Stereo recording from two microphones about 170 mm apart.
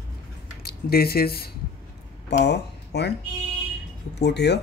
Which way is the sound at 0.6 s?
65° left (ahead or behind).